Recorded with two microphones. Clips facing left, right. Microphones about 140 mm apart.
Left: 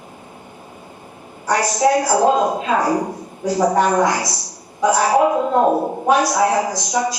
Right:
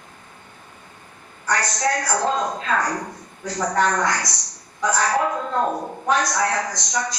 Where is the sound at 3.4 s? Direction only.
10° left (ahead or behind); by 6.0 s 30° left (ahead or behind).